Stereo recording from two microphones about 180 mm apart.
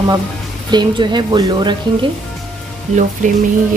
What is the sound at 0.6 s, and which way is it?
Speech, 25° right (ahead or behind).